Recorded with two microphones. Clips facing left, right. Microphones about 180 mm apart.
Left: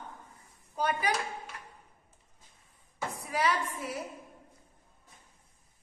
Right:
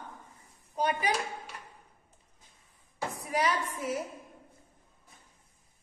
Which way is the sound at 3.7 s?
20° right (ahead or behind).